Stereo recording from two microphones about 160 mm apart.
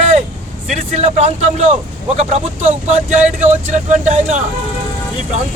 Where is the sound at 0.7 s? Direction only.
50° right (ahead or behind).